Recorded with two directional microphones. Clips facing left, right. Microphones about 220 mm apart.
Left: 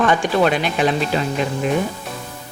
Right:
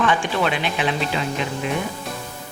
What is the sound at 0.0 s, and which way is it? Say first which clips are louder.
Speech: left 4 dB; 40° left (ahead or behind).